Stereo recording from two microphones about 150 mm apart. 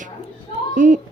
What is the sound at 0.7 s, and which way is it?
Speech, 60° right (ahead or behind).